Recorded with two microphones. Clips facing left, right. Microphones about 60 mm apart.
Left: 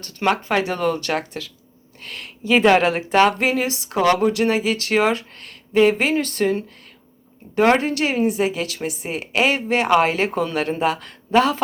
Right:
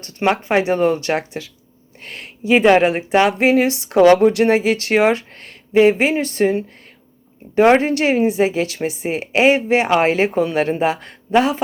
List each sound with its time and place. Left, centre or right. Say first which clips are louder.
0.2 s speech: right 3 dB; right
2.0 s speech: right 1 dB; right
2.5 s speech: right 3 dB; centre
7.8 s speech: right 4 dB; right
11.3 s speech: right 1 dB; centre